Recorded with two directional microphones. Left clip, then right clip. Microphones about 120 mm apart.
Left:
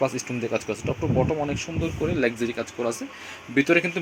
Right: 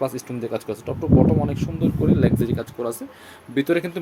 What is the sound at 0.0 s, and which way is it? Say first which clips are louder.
Speech: even; 25° right (ahead or behind).